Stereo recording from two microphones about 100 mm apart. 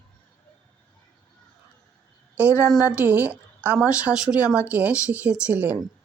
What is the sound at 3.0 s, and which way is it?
Speech, 20° right (ahead or behind).